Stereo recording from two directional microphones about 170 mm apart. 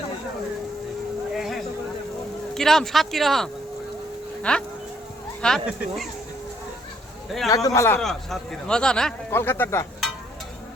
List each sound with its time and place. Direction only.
1.3 s a sound: centre (ahead or behind)
2.6 s speech: centre (ahead or behind)
7.3 s speech: centre (ahead or behind)
7.5 s a man's voice: 20° left (ahead or behind)
7.9 s speech: 5° left (ahead or behind)